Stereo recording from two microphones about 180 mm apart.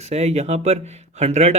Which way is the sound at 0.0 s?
35° right (ahead or behind).